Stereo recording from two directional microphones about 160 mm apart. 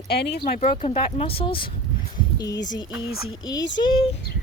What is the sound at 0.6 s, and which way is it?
Speech, 40° left (ahead or behind).